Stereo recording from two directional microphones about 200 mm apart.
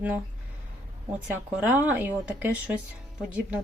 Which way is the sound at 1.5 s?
10° right (ahead or behind).